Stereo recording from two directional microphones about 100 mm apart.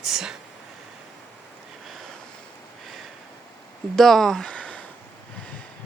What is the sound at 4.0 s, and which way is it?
Speech, 5° left (ahead or behind).